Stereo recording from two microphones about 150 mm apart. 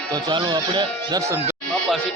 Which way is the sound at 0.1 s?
30° right (ahead or behind).